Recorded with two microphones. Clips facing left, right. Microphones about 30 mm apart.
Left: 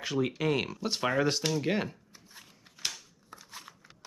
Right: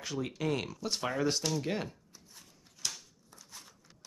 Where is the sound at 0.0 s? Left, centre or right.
Centre.